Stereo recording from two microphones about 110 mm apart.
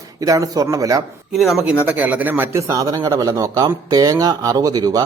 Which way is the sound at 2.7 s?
30° right (ahead or behind).